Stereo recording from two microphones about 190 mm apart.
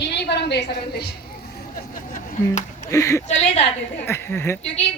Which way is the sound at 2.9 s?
15° left (ahead or behind).